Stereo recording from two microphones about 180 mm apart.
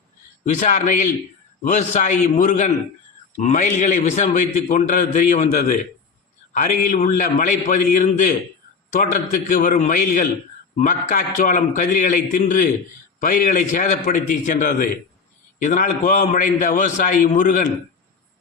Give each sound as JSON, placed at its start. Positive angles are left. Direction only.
{"t": 0.4, "sound": "a man's voice", "side_deg": 45}